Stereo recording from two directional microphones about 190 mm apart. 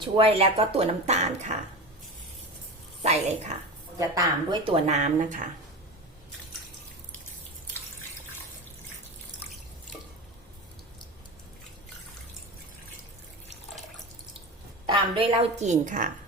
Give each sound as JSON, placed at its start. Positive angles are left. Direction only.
{"t": 0.0, "sound": "speech", "side_deg": -30}
{"t": 3.0, "sound": "speech", "side_deg": -35}
{"t": 3.9, "sound": "speech", "side_deg": -20}
{"t": 14.8, "sound": "speech", "side_deg": -25}